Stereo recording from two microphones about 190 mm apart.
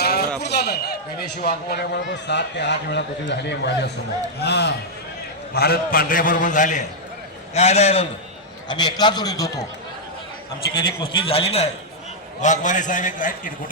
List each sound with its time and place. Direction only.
0.0 s a sound: 55° left (ahead or behind)
0.4 s a man's voice: 60° left (ahead or behind); by 8.0 s 35° left (ahead or behind)
8.6 s a man's voice: 20° left (ahead or behind)
10.8 s a man's voice: 25° left (ahead or behind); by 13.5 s 45° left (ahead or behind)